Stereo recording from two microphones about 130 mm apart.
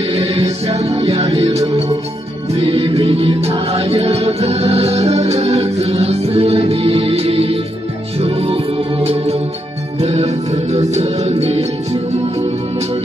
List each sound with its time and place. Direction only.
0.1 s music: 50° right (ahead or behind)